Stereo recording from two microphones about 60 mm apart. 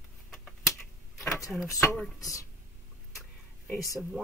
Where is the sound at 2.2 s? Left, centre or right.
Left.